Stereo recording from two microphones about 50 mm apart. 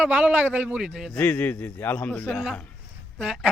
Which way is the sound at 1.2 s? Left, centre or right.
Left.